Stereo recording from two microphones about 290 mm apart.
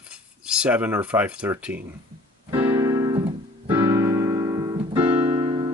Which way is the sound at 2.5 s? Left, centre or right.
Centre.